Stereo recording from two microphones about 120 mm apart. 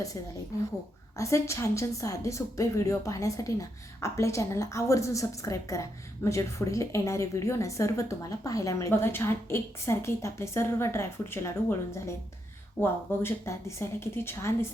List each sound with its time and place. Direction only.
1.1 s a woman's voice: 25° left (ahead or behind)